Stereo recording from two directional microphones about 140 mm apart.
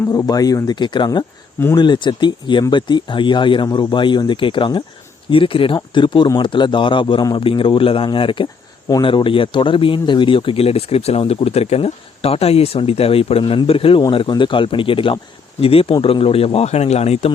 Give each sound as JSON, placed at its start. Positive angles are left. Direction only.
{"t": 0.0, "sound": "speech", "side_deg": 20}